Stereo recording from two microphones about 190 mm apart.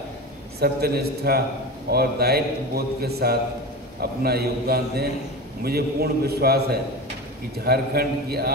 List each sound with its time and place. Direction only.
0.6 s a man's voice: 55° right (ahead or behind)